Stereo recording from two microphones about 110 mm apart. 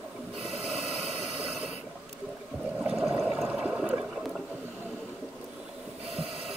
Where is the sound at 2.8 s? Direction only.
5° right (ahead or behind).